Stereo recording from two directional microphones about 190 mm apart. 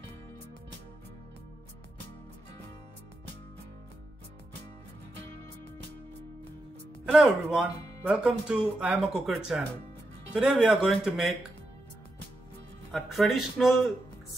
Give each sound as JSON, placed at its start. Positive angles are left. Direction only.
{"t": 7.1, "sound": "speech", "side_deg": 0}
{"t": 12.9, "sound": "speech", "side_deg": 0}